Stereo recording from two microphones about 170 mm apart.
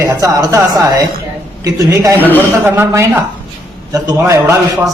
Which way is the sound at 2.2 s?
10° left (ahead or behind).